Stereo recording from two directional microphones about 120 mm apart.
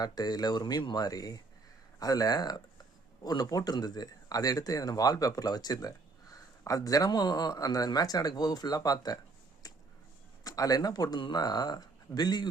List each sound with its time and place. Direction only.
0.0 s speech: 35° left (ahead or behind)
9.6 s a sound: 30° left (ahead or behind)
10.4 s speech: 30° left (ahead or behind)